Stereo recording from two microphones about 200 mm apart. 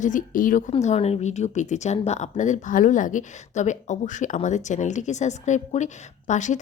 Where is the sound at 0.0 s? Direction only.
40° left (ahead or behind).